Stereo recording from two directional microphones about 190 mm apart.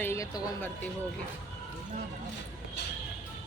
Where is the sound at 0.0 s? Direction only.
15° left (ahead or behind).